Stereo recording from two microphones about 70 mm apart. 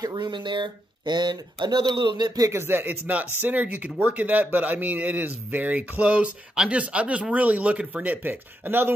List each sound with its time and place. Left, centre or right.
0.0 s speech: right
2.5 s speech: right